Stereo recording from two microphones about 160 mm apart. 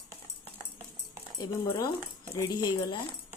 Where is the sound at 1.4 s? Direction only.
25° left (ahead or behind).